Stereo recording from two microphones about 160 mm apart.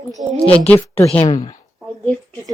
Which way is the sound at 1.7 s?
5° left (ahead or behind).